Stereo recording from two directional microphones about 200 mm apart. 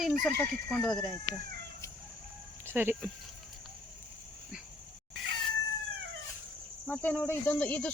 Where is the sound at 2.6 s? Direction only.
10° right (ahead or behind).